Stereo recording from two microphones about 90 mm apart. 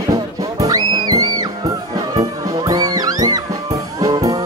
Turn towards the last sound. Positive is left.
turn(degrees=-40)  # may be behind; listen again after turning